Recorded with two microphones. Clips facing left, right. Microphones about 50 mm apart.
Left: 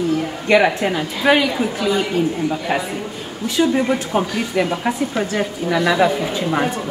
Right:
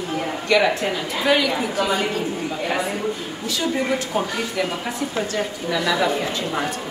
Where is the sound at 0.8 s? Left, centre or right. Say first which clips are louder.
Left 4 dB; centre.